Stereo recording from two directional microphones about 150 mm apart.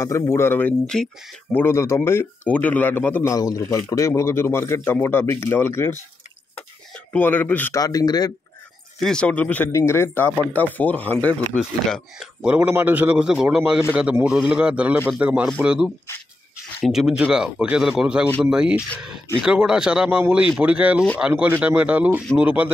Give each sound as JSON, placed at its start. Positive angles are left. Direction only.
{"t": 0.0, "sound": "speech", "side_deg": 20}
{"t": 7.1, "sound": "speech", "side_deg": 10}
{"t": 7.8, "sound": "speech", "side_deg": 25}
{"t": 9.0, "sound": "speech", "side_deg": 5}
{"t": 12.4, "sound": "a man's voice", "side_deg": -10}